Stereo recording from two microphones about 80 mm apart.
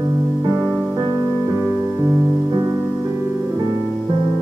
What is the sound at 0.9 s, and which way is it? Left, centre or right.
Music, right.